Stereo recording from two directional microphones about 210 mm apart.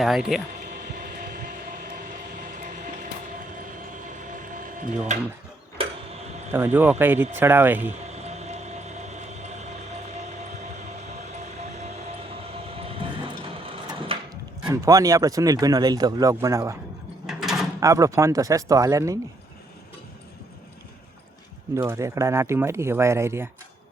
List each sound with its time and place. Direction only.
0.0 s speech: centre (ahead or behind)
0.6 s train: 45° right (ahead or behind)
3.9 s ratchet: 40° right (ahead or behind)
5.1 s speech: 35° right (ahead or behind)
5.8 s printer: 25° right (ahead or behind)
6.5 s speech: 10° right (ahead or behind)
8.0 s train: 30° right (ahead or behind)
11.3 s train: 35° right (ahead or behind)
14.6 s speech: 15° right (ahead or behind)
17.2 s a sound: centre (ahead or behind)
17.7 s speech: 15° right (ahead or behind)
21.8 s speech: 15° right (ahead or behind)